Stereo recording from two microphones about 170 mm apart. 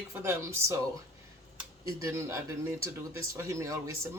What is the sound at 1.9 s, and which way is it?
Speech, 20° right (ahead or behind).